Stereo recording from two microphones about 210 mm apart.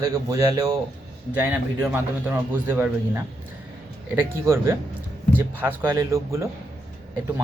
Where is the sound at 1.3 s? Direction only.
5° right (ahead or behind).